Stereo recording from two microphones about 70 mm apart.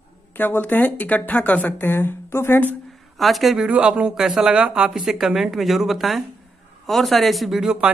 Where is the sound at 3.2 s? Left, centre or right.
Centre.